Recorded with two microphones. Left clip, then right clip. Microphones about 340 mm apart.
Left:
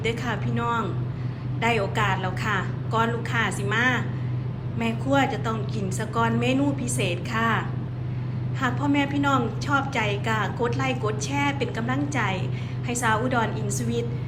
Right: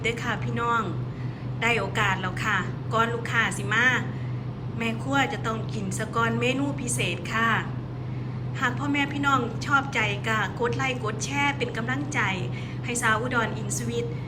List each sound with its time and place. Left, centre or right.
0.0 s a woman's voice: centre
8.6 s a woman's voice: centre